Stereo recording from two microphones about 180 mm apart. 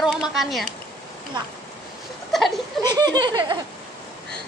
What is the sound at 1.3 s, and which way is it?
Speech, 25° right (ahead or behind).